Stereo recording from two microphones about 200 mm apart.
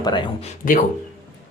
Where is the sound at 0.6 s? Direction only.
40° left (ahead or behind).